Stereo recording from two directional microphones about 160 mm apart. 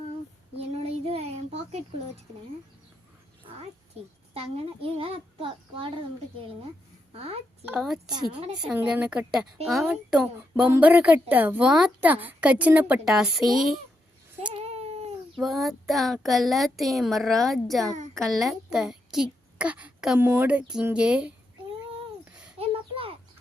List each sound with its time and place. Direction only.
0.8 s child singing: 40° right (ahead or behind)
4.4 s a child's voice: 35° right (ahead or behind)
7.1 s a child's voice: 40° right (ahead or behind)
7.6 s child singing: 5° right (ahead or behind)
8.1 s a woman's voice: 25° right (ahead or behind)
8.6 s child singing: 10° right (ahead or behind)
10.7 s a woman's voice: 10° right (ahead or behind)
15.4 s child singing: centre (ahead or behind)
18.1 s a woman's voice: centre (ahead or behind)
22.2 s a sound: 5° right (ahead or behind)
22.5 s a sound: 35° right (ahead or behind)